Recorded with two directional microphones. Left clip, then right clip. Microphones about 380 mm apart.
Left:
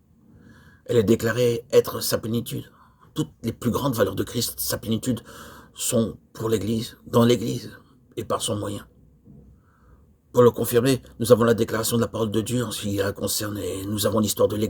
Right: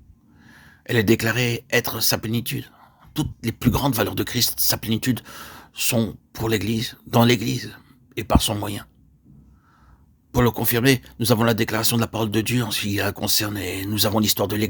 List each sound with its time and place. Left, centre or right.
0.9 s speech: right
10.3 s speech: right